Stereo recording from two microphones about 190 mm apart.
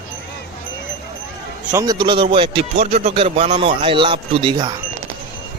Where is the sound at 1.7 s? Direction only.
15° right (ahead or behind).